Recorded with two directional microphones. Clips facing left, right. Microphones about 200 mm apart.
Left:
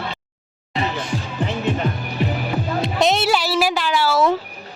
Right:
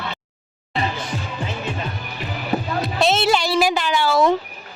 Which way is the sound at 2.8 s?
15° left (ahead or behind).